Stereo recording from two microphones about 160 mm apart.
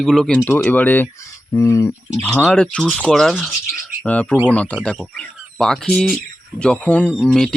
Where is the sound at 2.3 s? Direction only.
5° left (ahead or behind).